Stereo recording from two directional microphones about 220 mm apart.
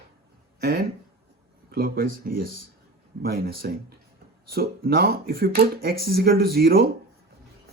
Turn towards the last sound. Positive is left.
turn(degrees=-45)  # may be behind; listen again after turning